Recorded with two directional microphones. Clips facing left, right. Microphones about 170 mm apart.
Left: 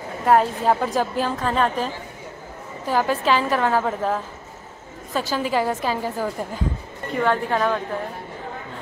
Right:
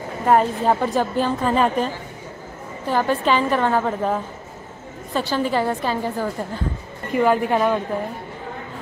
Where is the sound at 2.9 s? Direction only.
5° left (ahead or behind).